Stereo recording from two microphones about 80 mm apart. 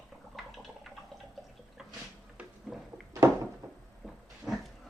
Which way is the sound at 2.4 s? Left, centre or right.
Centre.